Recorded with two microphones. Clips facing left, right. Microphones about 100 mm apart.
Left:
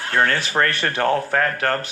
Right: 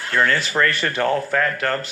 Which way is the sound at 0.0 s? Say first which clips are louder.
Even; 50° left (ahead or behind).